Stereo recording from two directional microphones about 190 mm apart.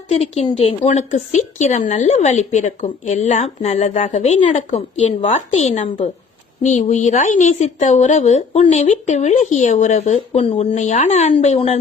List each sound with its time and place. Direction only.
0.1 s speech: 35° left (ahead or behind)